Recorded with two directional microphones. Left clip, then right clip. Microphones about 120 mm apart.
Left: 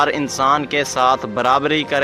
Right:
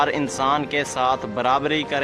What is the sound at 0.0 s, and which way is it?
A man's voice, 25° left (ahead or behind).